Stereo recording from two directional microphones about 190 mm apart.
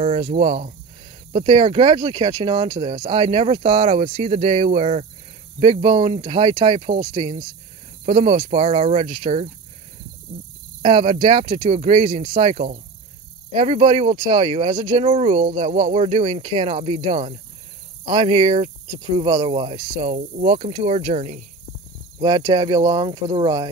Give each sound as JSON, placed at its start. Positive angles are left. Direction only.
{"t": 0.2, "sound": "speech", "side_deg": -35}
{"t": 10.8, "sound": "speech", "side_deg": -35}
{"t": 15.0, "sound": "speech", "side_deg": -35}
{"t": 22.2, "sound": "speech", "side_deg": -20}